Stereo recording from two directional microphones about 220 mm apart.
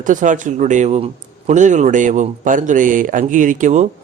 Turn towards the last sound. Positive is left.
turn(degrees=-35)  # may be behind; listen again after turning